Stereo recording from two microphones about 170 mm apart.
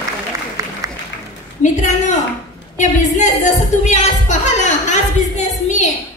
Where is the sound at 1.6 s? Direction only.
45° left (ahead or behind).